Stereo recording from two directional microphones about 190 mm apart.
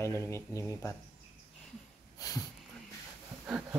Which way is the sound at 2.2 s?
20° left (ahead or behind).